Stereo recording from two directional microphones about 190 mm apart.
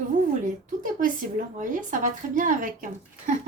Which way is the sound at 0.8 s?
45° right (ahead or behind).